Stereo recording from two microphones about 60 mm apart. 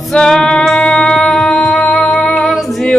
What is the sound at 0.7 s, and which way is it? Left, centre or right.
Music, centre.